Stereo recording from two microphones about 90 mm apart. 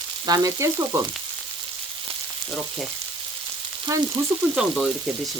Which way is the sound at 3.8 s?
35° right (ahead or behind).